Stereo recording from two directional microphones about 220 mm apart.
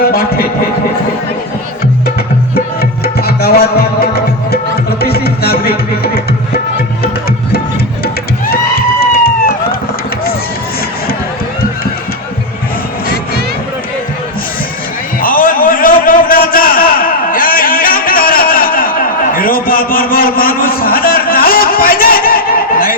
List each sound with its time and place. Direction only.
0.1 s speech: 40° left (ahead or behind)
3.0 s music: 45° left (ahead or behind)
9.0 s run: 45° left (ahead or behind)
15.2 s a sound: 40° left (ahead or behind)